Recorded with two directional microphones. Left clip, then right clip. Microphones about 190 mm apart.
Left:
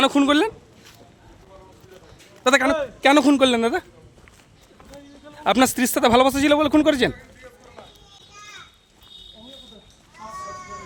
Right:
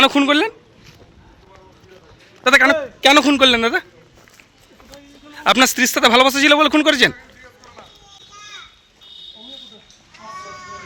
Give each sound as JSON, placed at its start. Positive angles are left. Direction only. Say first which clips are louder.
{"t": 0.0, "sound": "speech", "louder": "right 5 dB", "side_deg": 5}
{"t": 0.3, "sound": "speech", "louder": "right 3 dB", "side_deg": 15}
{"t": 2.4, "sound": "a man's voice", "louder": "right 5 dB", "side_deg": 25}
{"t": 3.0, "sound": "a man's voice", "louder": "right 4 dB", "side_deg": 5}
{"t": 3.2, "sound": "speech", "louder": "right 4 dB", "side_deg": 15}
{"t": 5.3, "sound": "speech", "louder": "right 5 dB", "side_deg": 10}